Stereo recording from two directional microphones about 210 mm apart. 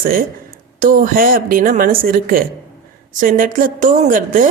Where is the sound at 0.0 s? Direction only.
45° right (ahead or behind).